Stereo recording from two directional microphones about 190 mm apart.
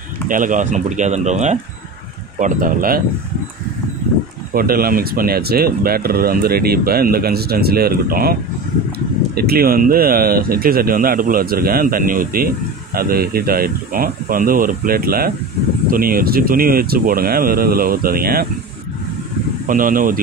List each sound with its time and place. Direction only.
0.3 s speech: 45° right (ahead or behind)
4.6 s speech: 50° right (ahead or behind)
19.6 s speech: 45° right (ahead or behind)